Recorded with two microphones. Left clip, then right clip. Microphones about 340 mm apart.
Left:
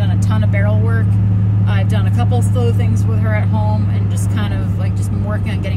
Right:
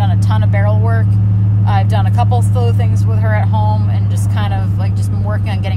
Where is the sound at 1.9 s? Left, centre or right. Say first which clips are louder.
Right 4 dB; right.